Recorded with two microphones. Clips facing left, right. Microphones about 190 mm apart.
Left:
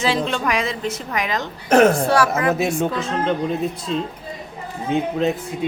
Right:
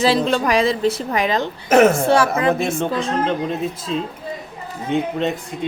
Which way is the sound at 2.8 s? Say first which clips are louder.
Right 1 dB; centre (ahead or behind).